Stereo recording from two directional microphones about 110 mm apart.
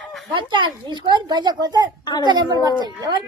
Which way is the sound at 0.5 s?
45° right (ahead or behind).